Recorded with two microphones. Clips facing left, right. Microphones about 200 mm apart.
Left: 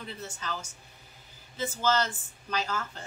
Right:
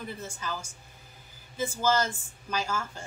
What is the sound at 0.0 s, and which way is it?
Speech, 10° right (ahead or behind).